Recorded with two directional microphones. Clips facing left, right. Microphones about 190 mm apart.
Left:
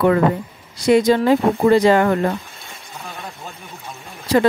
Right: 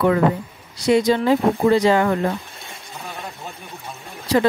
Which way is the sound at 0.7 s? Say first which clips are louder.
Left 3 dB; 50° left (ahead or behind).